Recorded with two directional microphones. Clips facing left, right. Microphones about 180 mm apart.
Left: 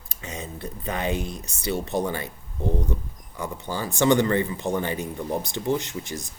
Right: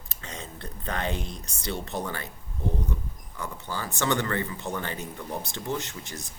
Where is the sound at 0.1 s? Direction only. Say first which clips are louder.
Left 5 dB; 10° left (ahead or behind).